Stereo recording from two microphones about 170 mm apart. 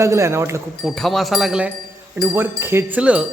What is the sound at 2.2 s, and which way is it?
Speech, 15° right (ahead or behind).